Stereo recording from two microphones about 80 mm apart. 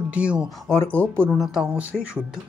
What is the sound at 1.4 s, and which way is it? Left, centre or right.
Speech, centre.